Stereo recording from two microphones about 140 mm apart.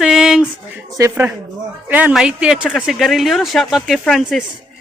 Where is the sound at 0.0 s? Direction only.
5° right (ahead or behind).